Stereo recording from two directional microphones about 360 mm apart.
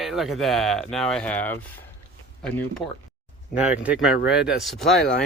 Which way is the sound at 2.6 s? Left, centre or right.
Centre.